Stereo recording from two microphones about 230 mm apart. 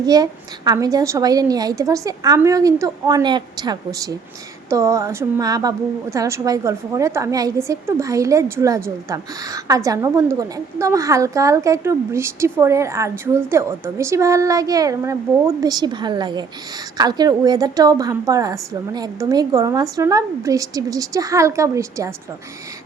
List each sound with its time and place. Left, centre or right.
0.0 s a woman's voice: centre